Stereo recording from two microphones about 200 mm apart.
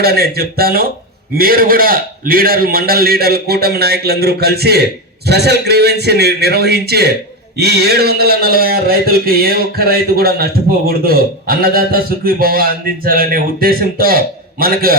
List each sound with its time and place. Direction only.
0.0 s speech: 50° right (ahead or behind)